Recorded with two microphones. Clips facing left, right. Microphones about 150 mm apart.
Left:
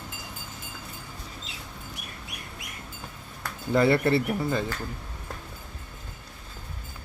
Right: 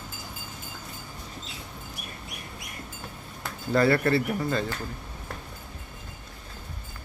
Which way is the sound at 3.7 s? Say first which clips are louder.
Left 1 dB; 20° left (ahead or behind).